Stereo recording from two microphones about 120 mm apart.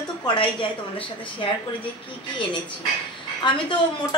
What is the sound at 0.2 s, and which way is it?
A woman's voice, 40° left (ahead or behind).